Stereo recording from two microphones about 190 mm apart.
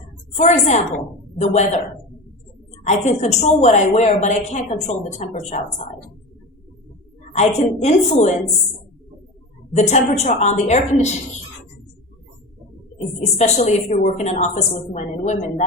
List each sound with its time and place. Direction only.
0.3 s a woman's voice: 35° left (ahead or behind)
2.8 s a woman's voice: 35° left (ahead or behind)
7.3 s a woman's voice: 35° left (ahead or behind)
9.7 s a woman's voice: 35° left (ahead or behind)
13.3 s a woman's voice: 35° left (ahead or behind)